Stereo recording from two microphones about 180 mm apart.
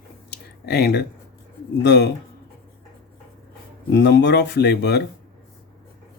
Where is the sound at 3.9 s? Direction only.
70° left (ahead or behind).